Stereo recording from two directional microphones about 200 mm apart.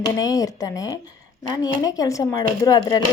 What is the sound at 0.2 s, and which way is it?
A woman's voice, 15° left (ahead or behind).